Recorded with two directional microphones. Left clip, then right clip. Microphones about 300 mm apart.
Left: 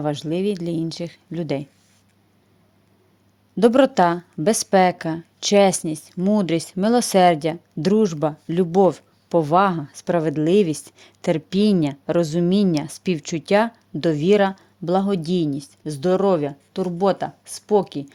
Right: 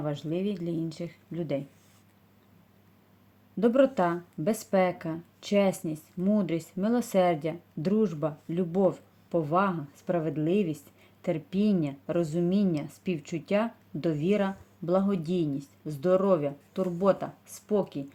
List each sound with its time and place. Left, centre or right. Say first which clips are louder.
0.0 s a woman's voice: left 9 dB; left
3.6 s a woman's voice: left 8 dB; left